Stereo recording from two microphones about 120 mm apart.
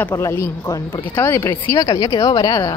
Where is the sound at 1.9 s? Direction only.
35° left (ahead or behind).